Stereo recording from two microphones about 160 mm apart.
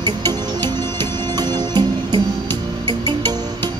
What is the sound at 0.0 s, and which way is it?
Music, 25° right (ahead or behind).